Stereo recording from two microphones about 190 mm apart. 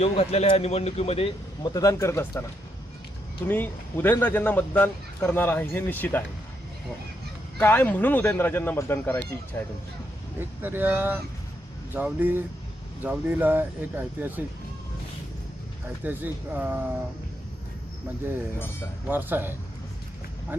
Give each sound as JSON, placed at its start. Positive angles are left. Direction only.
{"t": 0.0, "sound": "speech", "side_deg": 30}
{"t": 3.5, "sound": "a man's voice", "side_deg": 10}
{"t": 7.6, "sound": "a man's voice", "side_deg": 10}
{"t": 10.6, "sound": "speech", "side_deg": -10}
{"t": 16.0, "sound": "speech", "side_deg": -10}
{"t": 18.6, "sound": "a man's voice", "side_deg": 10}
{"t": 19.1, "sound": "speech", "side_deg": -10}